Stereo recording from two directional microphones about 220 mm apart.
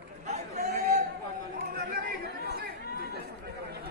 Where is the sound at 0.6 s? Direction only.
45° right (ahead or behind).